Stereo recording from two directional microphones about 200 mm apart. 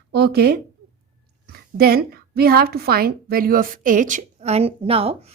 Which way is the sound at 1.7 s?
50° right (ahead or behind).